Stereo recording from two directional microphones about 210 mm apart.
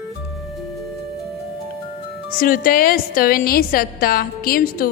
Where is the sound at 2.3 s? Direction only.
40° left (ahead or behind).